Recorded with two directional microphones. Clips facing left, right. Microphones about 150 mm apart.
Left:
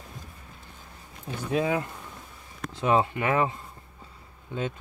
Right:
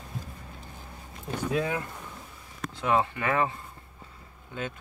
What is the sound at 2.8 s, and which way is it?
Speech, 20° left (ahead or behind).